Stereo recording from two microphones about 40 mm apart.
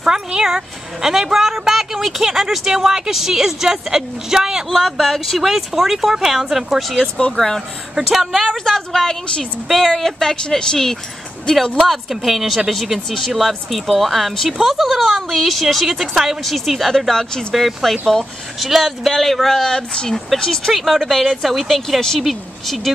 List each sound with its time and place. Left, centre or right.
0.0 s a woman's voice: centre
4.6 s speech: centre
7.3 s a woman's voice: centre
7.9 s speech: centre
8.5 s a woman's voice: centre
11.9 s speech: centre
17.1 s a woman's voice: centre
17.6 s speech: centre
20.7 s speech: centre